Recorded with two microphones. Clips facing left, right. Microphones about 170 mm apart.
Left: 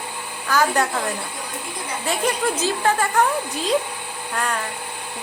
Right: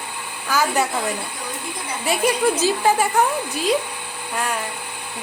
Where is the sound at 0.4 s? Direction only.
5° right (ahead or behind).